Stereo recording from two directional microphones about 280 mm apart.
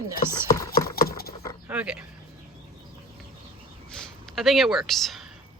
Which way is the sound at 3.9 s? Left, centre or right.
Centre.